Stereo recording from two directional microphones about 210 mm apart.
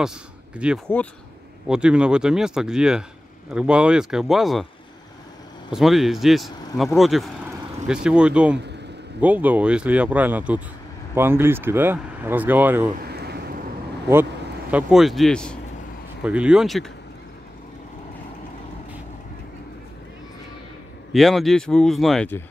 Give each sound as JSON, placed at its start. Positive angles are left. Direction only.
{"t": 0.6, "sound": "speech", "side_deg": -5}
{"t": 5.7, "sound": "speech", "side_deg": 0}
{"t": 13.1, "sound": "vehicle", "side_deg": -50}
{"t": 14.7, "sound": "speech", "side_deg": -5}
{"t": 21.1, "sound": "speech", "side_deg": 0}